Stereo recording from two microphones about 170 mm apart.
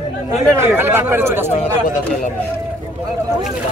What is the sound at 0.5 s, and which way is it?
Speech, 15° right (ahead or behind).